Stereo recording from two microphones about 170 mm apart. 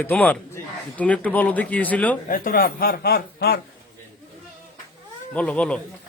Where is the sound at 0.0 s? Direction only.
10° left (ahead or behind).